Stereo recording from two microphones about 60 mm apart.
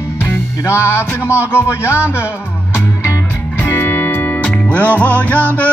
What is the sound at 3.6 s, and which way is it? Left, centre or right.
Music, left.